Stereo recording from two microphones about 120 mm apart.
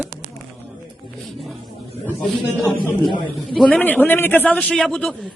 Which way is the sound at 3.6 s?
10° left (ahead or behind).